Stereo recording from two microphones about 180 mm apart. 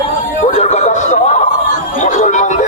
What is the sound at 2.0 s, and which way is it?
Music, 40° left (ahead or behind).